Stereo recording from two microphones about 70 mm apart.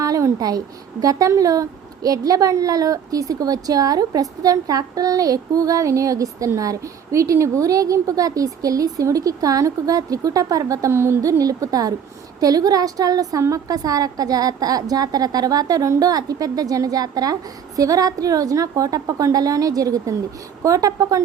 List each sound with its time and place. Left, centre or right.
0.0 s speech: right
10.9 s speech: right
11.2 s speech: right